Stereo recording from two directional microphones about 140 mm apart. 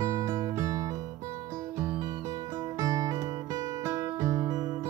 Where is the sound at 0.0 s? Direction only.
20° right (ahead or behind).